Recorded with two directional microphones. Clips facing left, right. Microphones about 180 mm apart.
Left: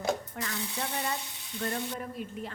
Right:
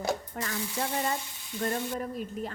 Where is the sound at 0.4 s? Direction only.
40° right (ahead or behind).